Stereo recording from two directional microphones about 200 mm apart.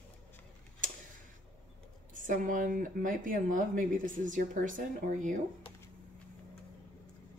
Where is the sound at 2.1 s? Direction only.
40° right (ahead or behind).